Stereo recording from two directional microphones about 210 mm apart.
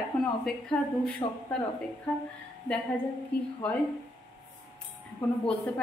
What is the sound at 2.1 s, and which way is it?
Speech, 5° left (ahead or behind).